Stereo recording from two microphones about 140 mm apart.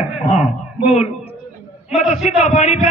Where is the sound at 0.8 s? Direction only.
50° left (ahead or behind).